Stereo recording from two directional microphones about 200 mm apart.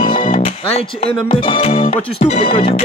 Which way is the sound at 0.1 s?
25° left (ahead or behind).